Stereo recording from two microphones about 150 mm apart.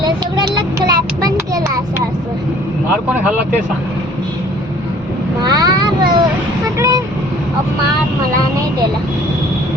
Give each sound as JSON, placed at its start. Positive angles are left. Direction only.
{"t": 0.0, "sound": "child singing", "side_deg": -25}
{"t": 3.2, "sound": "speech", "side_deg": -10}
{"t": 5.4, "sound": "child singing", "side_deg": -25}
{"t": 6.7, "sound": "vehicle", "side_deg": -25}